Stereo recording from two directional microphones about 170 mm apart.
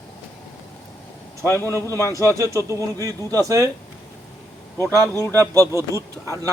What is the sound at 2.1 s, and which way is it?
Speech, 15° right (ahead or behind).